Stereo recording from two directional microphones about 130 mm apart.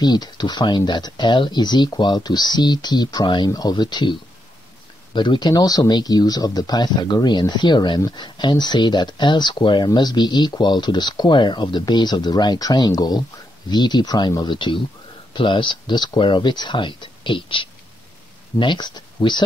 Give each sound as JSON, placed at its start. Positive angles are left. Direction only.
{"t": 0.0, "sound": "speech", "side_deg": 35}